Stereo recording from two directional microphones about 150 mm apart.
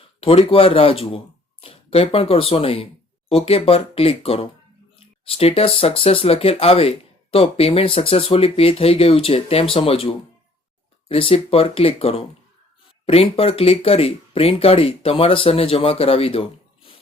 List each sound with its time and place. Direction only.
0.2 s speech: 40° left (ahead or behind)